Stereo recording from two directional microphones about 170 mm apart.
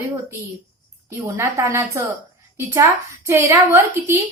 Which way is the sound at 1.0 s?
15° right (ahead or behind).